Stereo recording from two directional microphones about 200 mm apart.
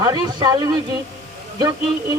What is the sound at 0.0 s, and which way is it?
A man's voice, 20° right (ahead or behind).